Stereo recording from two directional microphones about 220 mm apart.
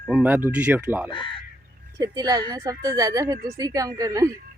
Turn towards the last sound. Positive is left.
turn(degrees=-15)  # may be behind; listen again after turning